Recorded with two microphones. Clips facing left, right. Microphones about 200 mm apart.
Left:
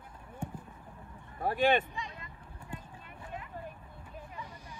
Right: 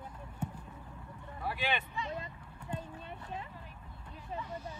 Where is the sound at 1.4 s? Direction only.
45° left (ahead or behind).